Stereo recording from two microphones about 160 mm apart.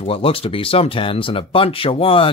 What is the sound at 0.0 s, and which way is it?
Speech, 35° left (ahead or behind).